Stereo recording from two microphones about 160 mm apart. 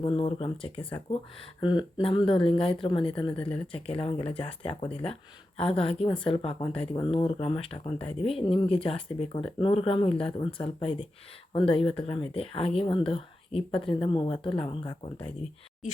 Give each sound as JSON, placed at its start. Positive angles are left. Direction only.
{"t": 0.0, "sound": "speech", "side_deg": 35}
{"t": 3.2, "sound": "speech", "side_deg": 10}
{"t": 3.7, "sound": "speech", "side_deg": 35}